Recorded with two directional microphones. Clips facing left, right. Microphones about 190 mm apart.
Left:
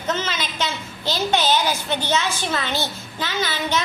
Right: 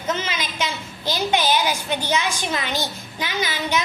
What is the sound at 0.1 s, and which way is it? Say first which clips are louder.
A woman's voice: left 1 dB; 10° right (ahead or behind).